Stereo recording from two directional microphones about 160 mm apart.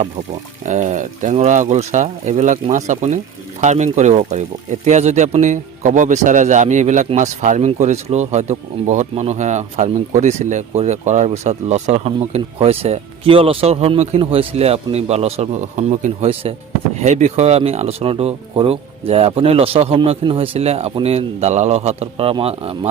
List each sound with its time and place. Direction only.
0.6 s a man's voice: 50° right (ahead or behind); by 22.9 s 35° right (ahead or behind)